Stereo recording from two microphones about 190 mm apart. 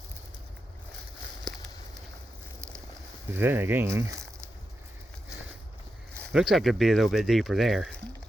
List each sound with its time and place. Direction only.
2.6 s a sound: 15° right (ahead or behind)
3.3 s speech: 10° right (ahead or behind)
6.3 s speech: centre (ahead or behind)